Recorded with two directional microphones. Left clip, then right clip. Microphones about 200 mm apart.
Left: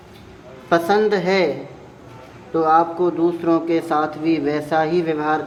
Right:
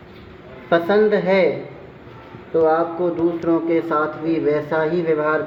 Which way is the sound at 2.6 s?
30° left (ahead or behind).